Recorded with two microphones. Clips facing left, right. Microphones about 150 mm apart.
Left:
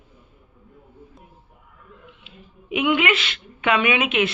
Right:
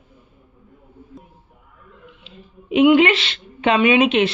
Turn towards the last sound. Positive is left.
turn(degrees=-30)  # may be behind; listen again after turning